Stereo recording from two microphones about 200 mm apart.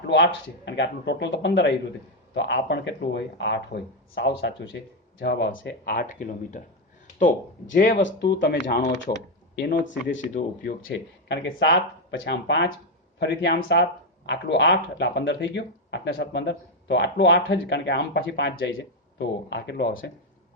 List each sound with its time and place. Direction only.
0.1 s speech: 60° left (ahead or behind)
5.8 s speech: 50° left (ahead or behind)
8.0 s speech: 60° left (ahead or behind)
9.1 s speech: 35° left (ahead or behind)
9.6 s speech: 60° left (ahead or behind)
10.3 s speech: 45° left (ahead or behind)
10.8 s speech: 60° left (ahead or behind)